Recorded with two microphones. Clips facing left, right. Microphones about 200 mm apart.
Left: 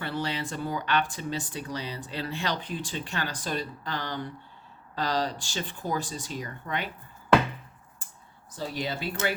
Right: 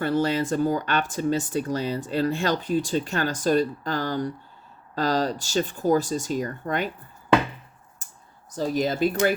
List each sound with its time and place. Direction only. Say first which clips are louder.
0.0 s speech: right 9 dB; 45° right (ahead or behind)
8.5 s speech: right 9 dB; 45° right (ahead or behind)